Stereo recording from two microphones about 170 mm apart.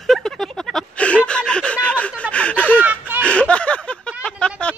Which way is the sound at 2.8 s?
10° right (ahead or behind).